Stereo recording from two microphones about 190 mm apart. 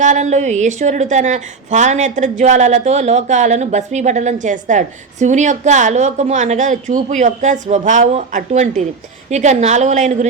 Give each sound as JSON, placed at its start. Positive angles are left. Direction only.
{"t": 0.0, "sound": "a woman's voice", "side_deg": -40}